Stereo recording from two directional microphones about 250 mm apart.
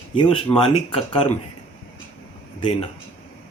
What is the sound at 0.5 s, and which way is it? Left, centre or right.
Speech, left.